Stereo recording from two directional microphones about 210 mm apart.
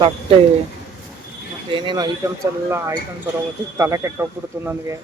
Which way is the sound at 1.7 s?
25° right (ahead or behind).